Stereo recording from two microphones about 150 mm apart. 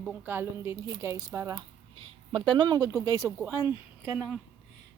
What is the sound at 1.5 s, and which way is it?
A woman's voice, 30° right (ahead or behind).